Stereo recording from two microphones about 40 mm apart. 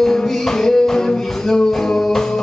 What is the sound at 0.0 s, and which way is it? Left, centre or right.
Music, centre.